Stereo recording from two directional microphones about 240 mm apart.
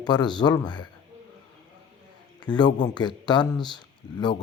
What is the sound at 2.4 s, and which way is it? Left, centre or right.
A man's voice, centre.